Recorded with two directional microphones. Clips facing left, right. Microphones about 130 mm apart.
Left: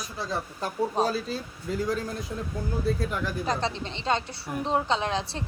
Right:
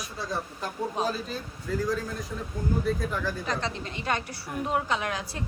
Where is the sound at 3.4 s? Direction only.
35° left (ahead or behind).